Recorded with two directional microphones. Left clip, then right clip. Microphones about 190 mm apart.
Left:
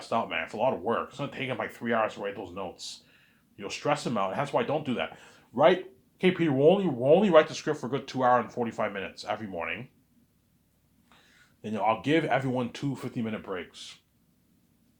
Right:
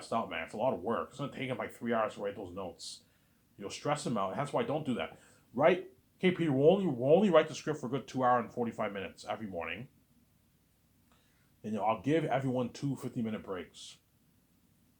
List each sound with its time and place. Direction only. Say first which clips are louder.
0.0 s speech: left 6 dB; 25° left (ahead or behind)
11.6 s speech: left 5 dB; 25° left (ahead or behind)